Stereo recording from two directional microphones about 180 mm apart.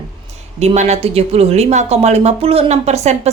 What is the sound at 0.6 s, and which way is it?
A woman's voice, 40° right (ahead or behind).